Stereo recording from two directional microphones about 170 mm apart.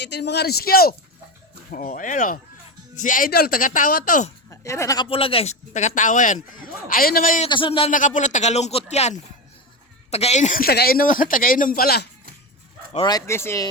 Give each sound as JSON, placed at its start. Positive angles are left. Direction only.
{"t": 0.0, "sound": "a man's voice", "side_deg": 85}
{"t": 1.7, "sound": "speech", "side_deg": 55}
{"t": 4.4, "sound": "speech", "side_deg": 15}
{"t": 5.0, "sound": "speech", "side_deg": 30}
{"t": 7.4, "sound": "speech", "side_deg": 30}
{"t": 7.9, "sound": "speech", "side_deg": 50}
{"t": 12.9, "sound": "speech", "side_deg": 25}